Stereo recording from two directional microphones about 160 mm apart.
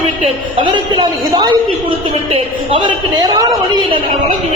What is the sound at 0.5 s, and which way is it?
Speech, 30° right (ahead or behind).